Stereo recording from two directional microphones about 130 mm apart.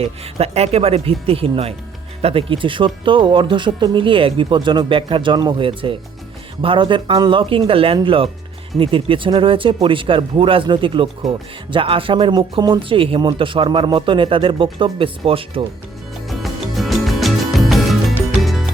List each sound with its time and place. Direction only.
0.0 s speech: 50° right (ahead or behind)
16.2 s music: centre (ahead or behind)